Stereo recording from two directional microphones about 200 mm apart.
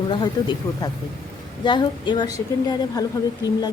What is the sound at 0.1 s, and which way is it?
Speech, 20° left (ahead or behind).